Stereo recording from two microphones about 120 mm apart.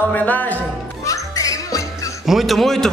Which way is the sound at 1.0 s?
30° left (ahead or behind).